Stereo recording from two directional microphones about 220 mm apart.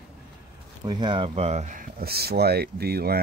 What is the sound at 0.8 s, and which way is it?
Speech, 20° right (ahead or behind).